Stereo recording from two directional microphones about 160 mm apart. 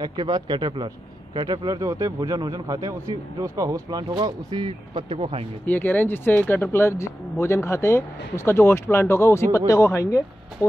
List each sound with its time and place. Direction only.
0.0 s a man's voice: 25° right (ahead or behind)
5.7 s speech: 10° left (ahead or behind)